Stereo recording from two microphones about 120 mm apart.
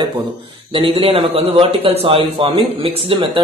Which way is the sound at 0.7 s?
45° right (ahead or behind).